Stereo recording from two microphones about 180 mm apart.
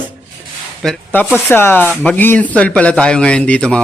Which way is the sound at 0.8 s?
5° left (ahead or behind).